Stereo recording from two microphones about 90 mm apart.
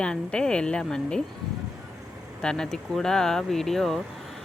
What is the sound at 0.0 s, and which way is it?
Speech, 10° left (ahead or behind).